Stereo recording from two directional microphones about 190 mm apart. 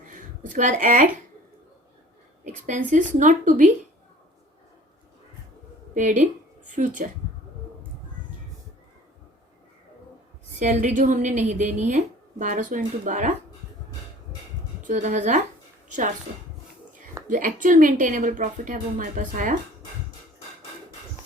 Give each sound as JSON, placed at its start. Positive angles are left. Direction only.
{"t": 0.1, "sound": "a woman's voice", "side_deg": -45}
{"t": 2.4, "sound": "a woman's voice", "side_deg": -40}
{"t": 5.9, "sound": "a woman's voice", "side_deg": -40}
{"t": 10.6, "sound": "a woman's voice", "side_deg": -40}
{"t": 14.8, "sound": "a woman's voice", "side_deg": -40}
{"t": 17.2, "sound": "a woman's voice", "side_deg": -45}